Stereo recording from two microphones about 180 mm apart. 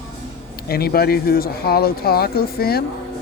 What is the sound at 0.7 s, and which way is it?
Speech, 60° left (ahead or behind).